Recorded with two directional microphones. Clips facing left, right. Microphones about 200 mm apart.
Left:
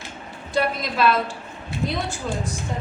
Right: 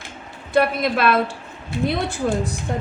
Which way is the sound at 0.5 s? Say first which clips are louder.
Right 5 dB; 60° right (ahead or behind).